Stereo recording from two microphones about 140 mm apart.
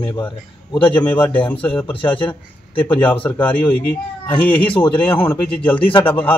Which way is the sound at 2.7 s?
35° left (ahead or behind).